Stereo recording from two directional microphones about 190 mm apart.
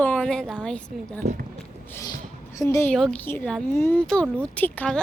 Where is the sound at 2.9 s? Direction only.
5° left (ahead or behind).